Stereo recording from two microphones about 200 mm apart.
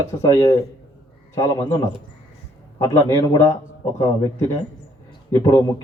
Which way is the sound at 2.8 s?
15° left (ahead or behind).